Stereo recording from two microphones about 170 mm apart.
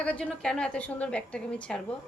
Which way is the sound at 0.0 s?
5° left (ahead or behind).